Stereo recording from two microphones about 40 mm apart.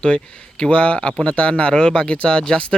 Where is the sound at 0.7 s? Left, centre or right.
Left.